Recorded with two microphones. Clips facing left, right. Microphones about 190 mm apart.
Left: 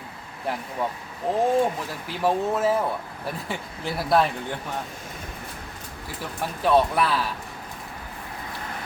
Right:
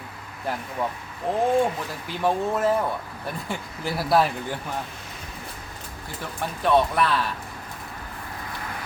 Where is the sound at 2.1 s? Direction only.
5° left (ahead or behind).